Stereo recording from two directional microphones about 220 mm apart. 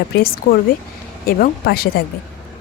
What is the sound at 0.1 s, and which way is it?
Speech, 45° left (ahead or behind).